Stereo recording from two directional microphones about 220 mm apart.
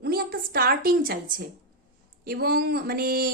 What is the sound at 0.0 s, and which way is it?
A woman's voice, 45° right (ahead or behind).